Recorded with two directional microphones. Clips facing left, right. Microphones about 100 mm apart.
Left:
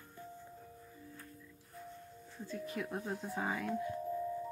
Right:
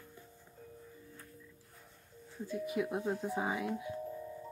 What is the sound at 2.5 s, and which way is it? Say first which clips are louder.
Speech: right 5 dB; 15° right (ahead or behind).